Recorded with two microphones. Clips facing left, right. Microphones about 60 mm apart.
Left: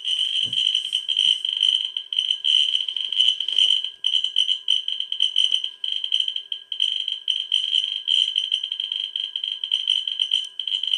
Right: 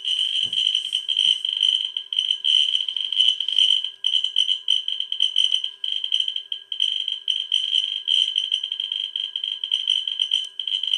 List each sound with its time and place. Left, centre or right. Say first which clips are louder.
0.0 s fire alarm: even; centre
3.2 s a sound: even; centre
5.2 s music: even; centre
7.7 s fire alarm: even; centre
9.7 s fire alarm: even; centre